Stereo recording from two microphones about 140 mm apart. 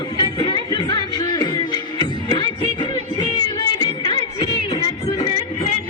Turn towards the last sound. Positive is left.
turn(degrees=30)  # may be behind; listen again after turning